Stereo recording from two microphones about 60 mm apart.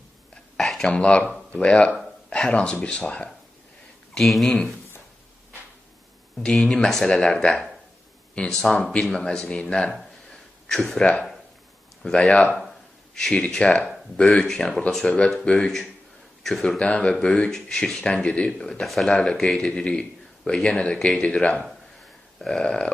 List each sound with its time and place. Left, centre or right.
0.6 s a sound: centre
0.8 s speech: centre
4.1 s speech: centre
6.4 s speech: centre
8.8 s speech: centre
11.0 s speech: centre
12.5 s a sound: centre
13.5 s speech: centre
15.1 s speech: centre
19.6 s speech: centre